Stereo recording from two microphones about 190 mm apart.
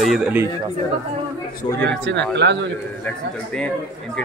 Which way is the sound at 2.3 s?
65° right (ahead or behind).